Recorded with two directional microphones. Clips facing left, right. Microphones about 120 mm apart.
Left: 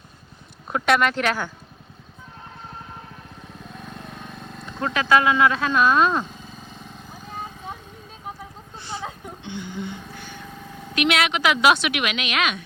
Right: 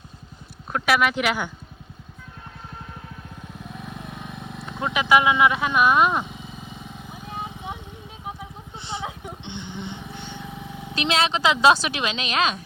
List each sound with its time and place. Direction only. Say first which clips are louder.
0.7 s speech: left 1 dB; 5° right (ahead or behind)
3.6 s vehicle: right 1 dB; 5° right (ahead or behind)
8.7 s a sound: right 1 dB; 20° right (ahead or behind)
9.4 s vehicle: left 5 dB; 20° right (ahead or behind)
10.5 s vehicle: right 2 dB; 5° right (ahead or behind)
10.8 s speech: left 1 dB; 30° right (ahead or behind)